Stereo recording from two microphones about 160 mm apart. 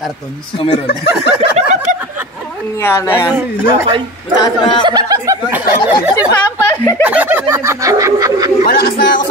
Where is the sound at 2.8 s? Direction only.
15° left (ahead or behind).